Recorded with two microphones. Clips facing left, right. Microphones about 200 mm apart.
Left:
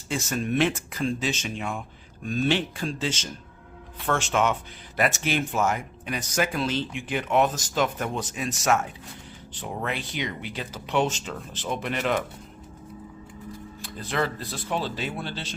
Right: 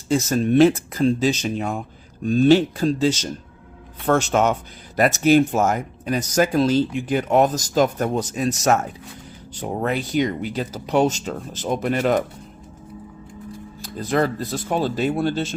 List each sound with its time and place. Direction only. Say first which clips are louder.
0.1 s speech: right 9 dB; 35° right (ahead or behind)
13.8 s speech: right 7 dB; 40° right (ahead or behind)